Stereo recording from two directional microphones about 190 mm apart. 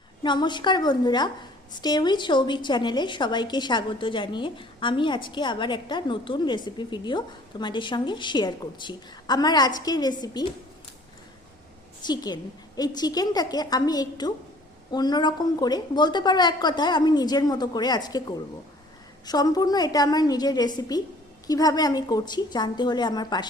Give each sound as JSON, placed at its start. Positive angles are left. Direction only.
{"t": 0.2, "sound": "a woman's voice", "side_deg": 25}
{"t": 12.0, "sound": "a woman's voice", "side_deg": 20}